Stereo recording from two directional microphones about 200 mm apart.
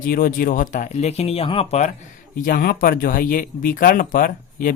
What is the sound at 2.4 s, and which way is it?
Speech, 45° left (ahead or behind).